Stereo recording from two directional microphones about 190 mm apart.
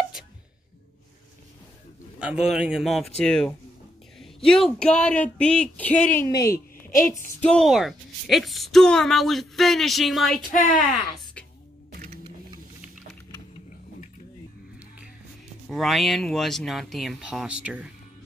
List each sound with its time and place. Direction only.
2.1 s a woman's voice: 5° right (ahead or behind)
7.4 s a woman's voice: centre (ahead or behind)
10.5 s speech: 45° left (ahead or behind)
10.8 s a sound: centre (ahead or behind)
15.7 s a woman's voice: centre (ahead or behind)